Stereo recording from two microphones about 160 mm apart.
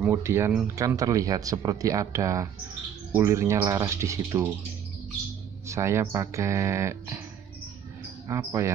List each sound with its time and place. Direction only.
0.0 s speech: 15° right (ahead or behind)
5.7 s speech: 15° right (ahead or behind)
8.3 s speech: 20° right (ahead or behind)